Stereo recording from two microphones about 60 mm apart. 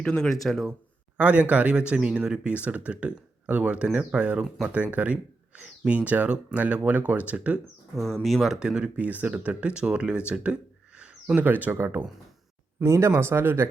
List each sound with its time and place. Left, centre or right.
0.0 s speech: centre
1.1 s speech: right
7.9 s speech: centre
8.5 s speech: centre
9.0 s speech: right
11.3 s speech: right
12.8 s speech: right